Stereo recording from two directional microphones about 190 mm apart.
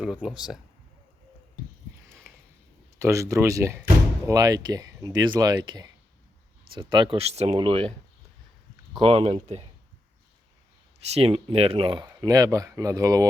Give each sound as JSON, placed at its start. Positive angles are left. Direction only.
{"t": 0.0, "sound": "speech", "side_deg": -5}
{"t": 3.0, "sound": "speech", "side_deg": -15}
{"t": 9.0, "sound": "speech", "side_deg": -30}
{"t": 11.1, "sound": "speech", "side_deg": -30}